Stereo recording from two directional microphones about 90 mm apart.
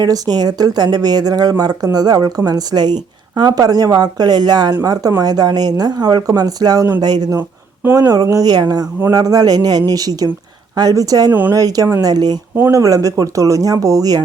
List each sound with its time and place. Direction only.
0.0 s speech: 50° right (ahead or behind)
11.3 s speech: 20° right (ahead or behind)
11.5 s speech: 45° right (ahead or behind)